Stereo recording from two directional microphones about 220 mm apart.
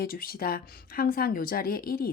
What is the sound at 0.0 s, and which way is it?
A woman's voice, 40° left (ahead or behind).